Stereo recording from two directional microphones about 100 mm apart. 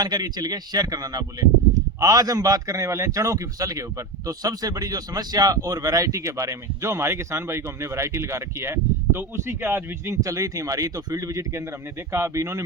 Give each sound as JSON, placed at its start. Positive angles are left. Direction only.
{"t": 0.0, "sound": "a man's voice", "side_deg": -40}
{"t": 10.2, "sound": "a man's voice", "side_deg": -35}